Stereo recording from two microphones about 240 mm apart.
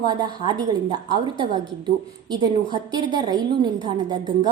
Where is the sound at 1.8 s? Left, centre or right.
Centre.